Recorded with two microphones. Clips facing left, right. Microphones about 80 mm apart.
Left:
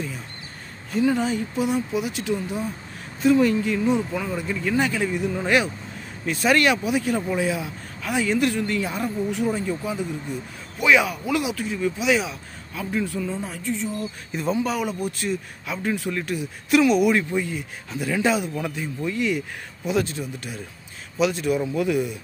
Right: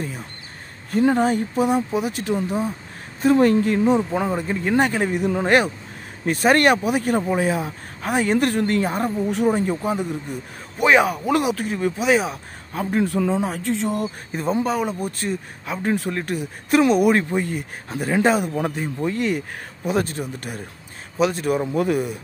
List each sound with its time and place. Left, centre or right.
0.9 s speech: right
5.1 s speech: right
14.3 s speech: right
21.2 s speech: right